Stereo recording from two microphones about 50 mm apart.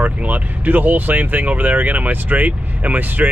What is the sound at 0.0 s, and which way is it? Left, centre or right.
Speech, right.